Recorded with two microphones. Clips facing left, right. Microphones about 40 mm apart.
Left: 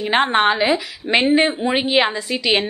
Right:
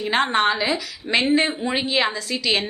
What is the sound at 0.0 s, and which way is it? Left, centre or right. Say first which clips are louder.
A woman's voice: left 3 dB; left.